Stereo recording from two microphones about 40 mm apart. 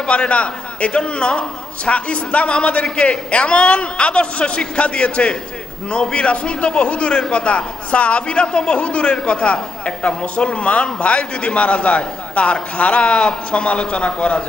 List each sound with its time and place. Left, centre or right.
0.1 s a man's voice: left